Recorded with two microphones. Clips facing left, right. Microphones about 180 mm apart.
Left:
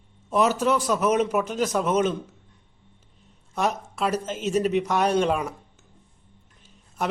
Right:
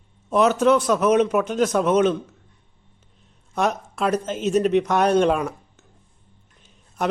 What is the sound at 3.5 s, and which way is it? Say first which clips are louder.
A man's voice: right 3 dB; 5° left (ahead or behind).